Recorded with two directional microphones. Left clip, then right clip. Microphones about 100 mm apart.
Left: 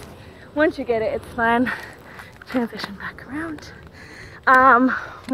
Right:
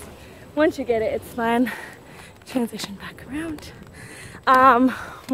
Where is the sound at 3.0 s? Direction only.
35° right (ahead or behind).